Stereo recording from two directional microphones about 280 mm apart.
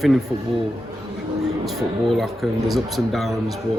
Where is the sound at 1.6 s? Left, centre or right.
Centre.